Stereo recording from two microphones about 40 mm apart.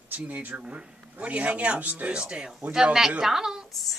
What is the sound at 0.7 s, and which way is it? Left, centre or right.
Speech, right.